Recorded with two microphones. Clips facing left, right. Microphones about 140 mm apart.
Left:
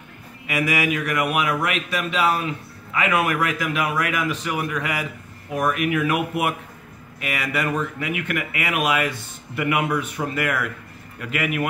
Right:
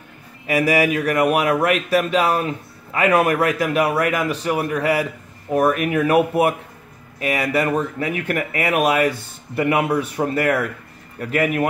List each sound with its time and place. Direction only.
0.5 s speech: 35° right (ahead or behind)